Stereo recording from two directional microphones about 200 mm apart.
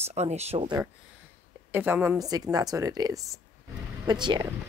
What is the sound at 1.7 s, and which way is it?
A woman's voice, 10° right (ahead or behind).